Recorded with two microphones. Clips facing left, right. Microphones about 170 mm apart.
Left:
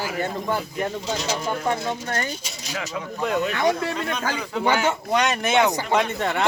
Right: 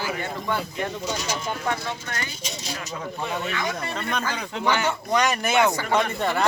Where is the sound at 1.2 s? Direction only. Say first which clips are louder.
Left 5 dB; 35° left (ahead or behind).